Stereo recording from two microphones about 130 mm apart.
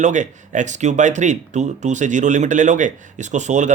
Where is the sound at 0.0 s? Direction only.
70° right (ahead or behind).